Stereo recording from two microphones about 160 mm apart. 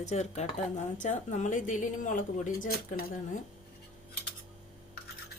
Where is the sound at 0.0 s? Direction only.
45° left (ahead or behind); by 3.1 s 65° left (ahead or behind).